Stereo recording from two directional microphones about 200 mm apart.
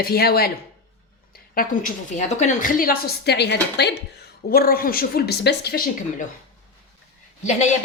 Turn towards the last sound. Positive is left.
turn(degrees=35)  # may be behind; listen again after turning